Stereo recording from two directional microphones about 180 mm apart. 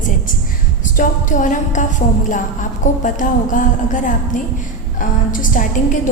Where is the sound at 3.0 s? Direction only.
45° left (ahead or behind).